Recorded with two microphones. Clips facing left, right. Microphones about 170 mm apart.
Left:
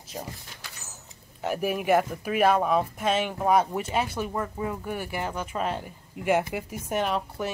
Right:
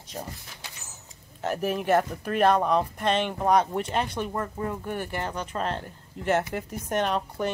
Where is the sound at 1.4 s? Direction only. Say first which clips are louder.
Even; 10° left (ahead or behind).